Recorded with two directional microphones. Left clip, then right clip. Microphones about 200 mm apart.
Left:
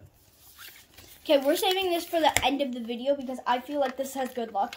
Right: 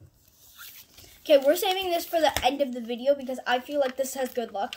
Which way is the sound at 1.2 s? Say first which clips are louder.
Right 3 dB; centre (ahead or behind).